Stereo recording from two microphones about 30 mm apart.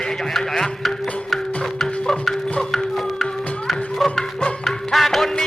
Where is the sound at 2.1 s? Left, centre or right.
Centre.